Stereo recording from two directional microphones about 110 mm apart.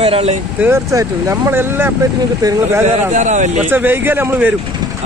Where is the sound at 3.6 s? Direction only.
15° right (ahead or behind).